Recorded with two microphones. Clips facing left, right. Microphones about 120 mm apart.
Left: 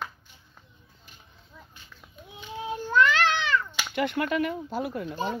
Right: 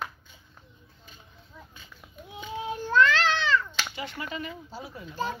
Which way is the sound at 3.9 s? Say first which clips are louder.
Left 9 dB; 60° left (ahead or behind).